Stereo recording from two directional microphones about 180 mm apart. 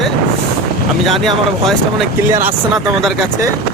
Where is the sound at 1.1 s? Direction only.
Centre (ahead or behind).